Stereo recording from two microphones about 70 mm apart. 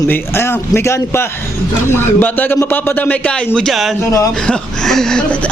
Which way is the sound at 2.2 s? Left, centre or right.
Left.